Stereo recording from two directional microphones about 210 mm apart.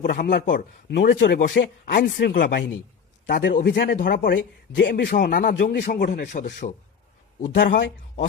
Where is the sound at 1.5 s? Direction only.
50° left (ahead or behind).